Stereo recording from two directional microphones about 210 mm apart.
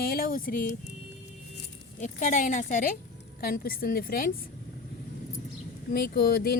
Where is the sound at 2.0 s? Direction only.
35° left (ahead or behind).